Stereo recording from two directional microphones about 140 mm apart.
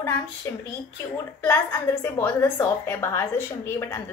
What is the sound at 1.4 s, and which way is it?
A woman's voice, 20° left (ahead or behind).